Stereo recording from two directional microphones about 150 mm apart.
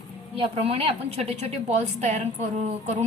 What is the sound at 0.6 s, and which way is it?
A woman's voice, 40° right (ahead or behind).